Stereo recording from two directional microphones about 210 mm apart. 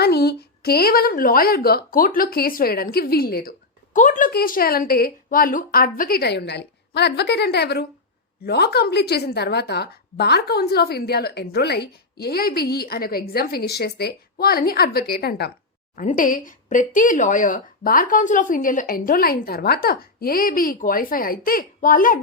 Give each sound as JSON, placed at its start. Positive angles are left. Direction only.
{"t": 0.0, "sound": "a woman's voice", "side_deg": 50}
{"t": 16.0, "sound": "speech", "side_deg": 40}